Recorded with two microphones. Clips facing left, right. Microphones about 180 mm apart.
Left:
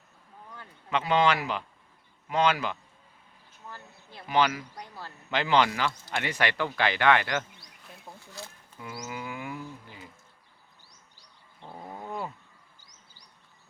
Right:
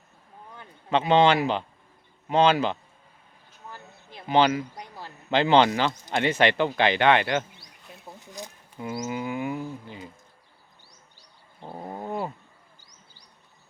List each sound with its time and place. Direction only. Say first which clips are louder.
0.5 s speech: right 5 dB; 25° right (ahead or behind)
3.7 s a sound: right 2 dB; 15° right (ahead or behind)
4.3 s speech: right 5 dB; 30° right (ahead or behind)
5.3 s speech: right 5 dB; 30° right (ahead or behind)
11.6 s cat: right 5 dB; 35° right (ahead or behind)